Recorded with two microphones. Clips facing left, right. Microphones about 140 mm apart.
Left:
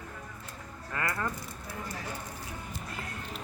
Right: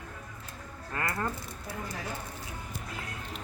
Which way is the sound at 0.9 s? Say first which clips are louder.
Even; 25° right (ahead or behind).